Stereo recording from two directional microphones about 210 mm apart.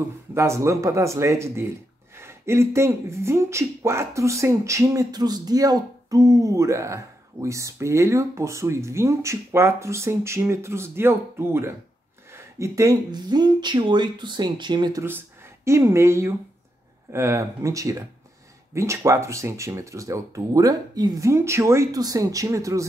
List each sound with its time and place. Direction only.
0.3 s speech: 15° right (ahead or behind)